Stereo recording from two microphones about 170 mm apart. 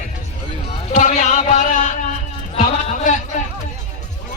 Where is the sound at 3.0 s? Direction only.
45° left (ahead or behind).